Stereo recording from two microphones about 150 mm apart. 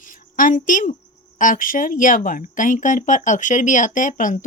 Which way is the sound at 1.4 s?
60° left (ahead or behind).